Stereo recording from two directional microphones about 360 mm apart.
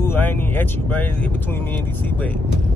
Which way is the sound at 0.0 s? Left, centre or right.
Centre.